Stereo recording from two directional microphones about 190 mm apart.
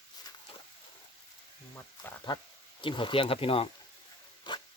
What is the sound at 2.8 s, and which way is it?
Speech, 25° left (ahead or behind).